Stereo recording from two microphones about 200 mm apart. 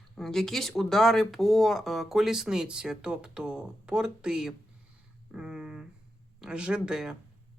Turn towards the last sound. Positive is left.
turn(degrees=-5)  # may be behind; listen again after turning